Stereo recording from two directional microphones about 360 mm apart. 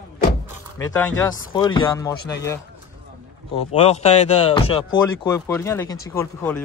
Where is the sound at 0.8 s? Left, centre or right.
Centre.